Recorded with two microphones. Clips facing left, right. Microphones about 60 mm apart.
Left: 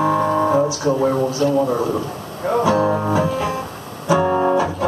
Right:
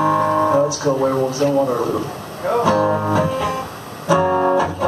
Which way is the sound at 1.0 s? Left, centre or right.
Right.